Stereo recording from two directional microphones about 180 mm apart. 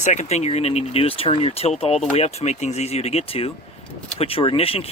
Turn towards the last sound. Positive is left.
turn(degrees=30)  # may be behind; listen again after turning